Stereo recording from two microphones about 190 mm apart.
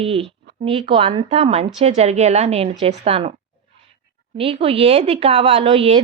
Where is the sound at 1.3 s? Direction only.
35° right (ahead or behind).